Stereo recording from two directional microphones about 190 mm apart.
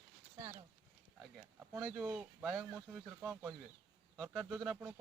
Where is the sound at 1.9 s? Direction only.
Centre (ahead or behind).